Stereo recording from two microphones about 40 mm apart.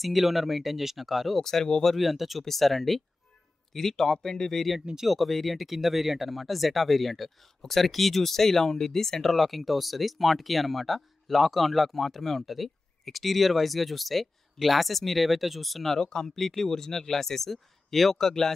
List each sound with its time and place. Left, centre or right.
0.0 s speech: centre
1.4 s speech: centre
2.0 s speech: centre
5.0 s speech: centre
16.0 s speech: centre